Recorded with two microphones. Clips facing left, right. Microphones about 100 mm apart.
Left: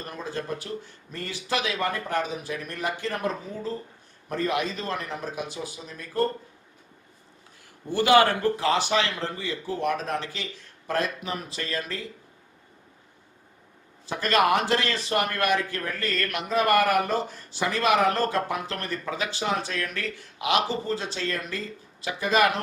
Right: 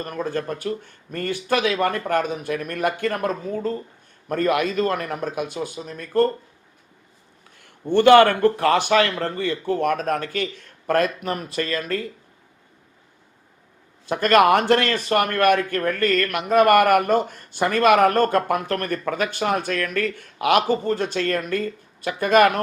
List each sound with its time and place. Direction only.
0.0 s speech: 55° right (ahead or behind)
7.6 s speech: 60° right (ahead or behind)
14.1 s speech: 55° right (ahead or behind)